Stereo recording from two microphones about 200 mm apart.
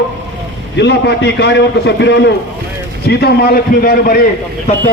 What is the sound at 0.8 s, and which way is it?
A man's voice, 60° left (ahead or behind).